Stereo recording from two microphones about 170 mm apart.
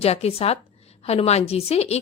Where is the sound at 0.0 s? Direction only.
35° left (ahead or behind).